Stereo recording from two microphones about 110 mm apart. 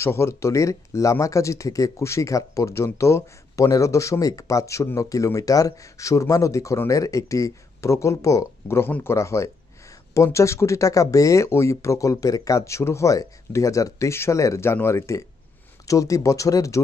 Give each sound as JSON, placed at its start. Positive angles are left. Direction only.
{"t": 0.0, "sound": "speech", "side_deg": 25}